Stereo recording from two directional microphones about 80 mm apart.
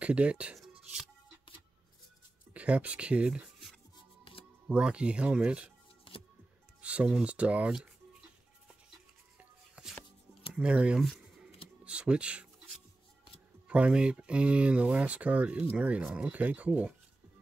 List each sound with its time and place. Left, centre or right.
0.0 s speech: centre
2.5 s speech: centre
4.6 s speech: centre
6.8 s speech: centre
9.4 s music: centre
10.5 s speech: centre
11.0 s speech: centre
11.4 s music: centre
13.7 s speech: centre